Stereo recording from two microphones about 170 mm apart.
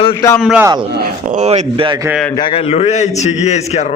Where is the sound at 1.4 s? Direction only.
40° right (ahead or behind).